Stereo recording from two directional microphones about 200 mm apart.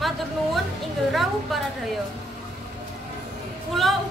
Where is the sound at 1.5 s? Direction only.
Centre (ahead or behind).